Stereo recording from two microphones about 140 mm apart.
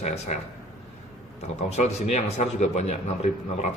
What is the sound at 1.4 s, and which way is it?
Speech, 50° left (ahead or behind).